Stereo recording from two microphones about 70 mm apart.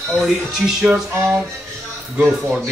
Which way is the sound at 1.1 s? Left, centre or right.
Right.